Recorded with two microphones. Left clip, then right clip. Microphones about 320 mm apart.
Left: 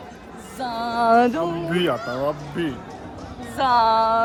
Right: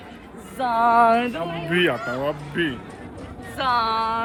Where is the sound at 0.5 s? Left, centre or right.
Centre.